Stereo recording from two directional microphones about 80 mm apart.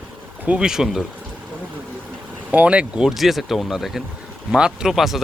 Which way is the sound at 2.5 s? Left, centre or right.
Centre.